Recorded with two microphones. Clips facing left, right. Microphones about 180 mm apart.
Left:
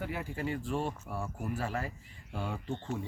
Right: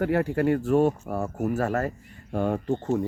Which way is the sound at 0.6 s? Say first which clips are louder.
Right 13 dB; 45° right (ahead or behind).